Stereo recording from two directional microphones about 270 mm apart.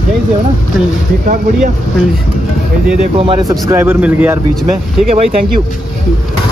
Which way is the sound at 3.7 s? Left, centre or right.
Centre.